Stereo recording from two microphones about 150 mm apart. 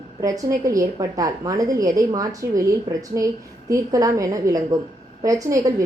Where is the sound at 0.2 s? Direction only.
20° right (ahead or behind).